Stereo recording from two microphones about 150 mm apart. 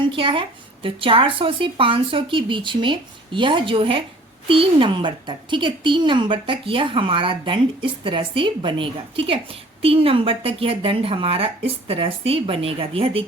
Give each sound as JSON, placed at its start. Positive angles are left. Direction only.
{"t": 0.1, "sound": "a woman's voice", "side_deg": -35}